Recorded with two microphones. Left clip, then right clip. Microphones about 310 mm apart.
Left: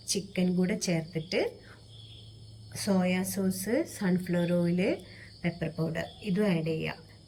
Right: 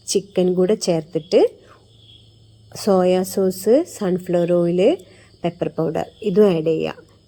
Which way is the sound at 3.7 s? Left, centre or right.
Centre.